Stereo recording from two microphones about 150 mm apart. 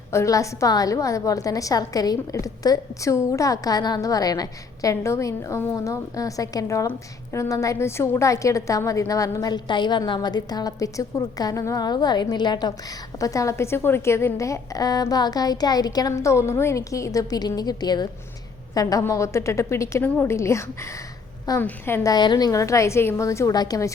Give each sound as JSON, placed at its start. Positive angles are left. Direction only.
{"t": 0.1, "sound": "a woman's voice", "side_deg": 20}
{"t": 22.1, "sound": "a woman's voice", "side_deg": 30}